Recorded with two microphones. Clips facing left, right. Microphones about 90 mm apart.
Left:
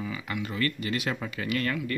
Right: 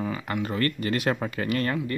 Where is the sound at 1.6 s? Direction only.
30° right (ahead or behind).